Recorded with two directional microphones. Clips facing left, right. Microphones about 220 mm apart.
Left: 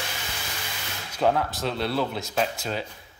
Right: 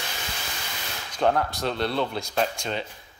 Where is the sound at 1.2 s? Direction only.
5° left (ahead or behind).